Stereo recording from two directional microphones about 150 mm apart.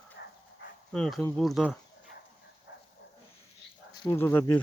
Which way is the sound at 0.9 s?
5° left (ahead or behind).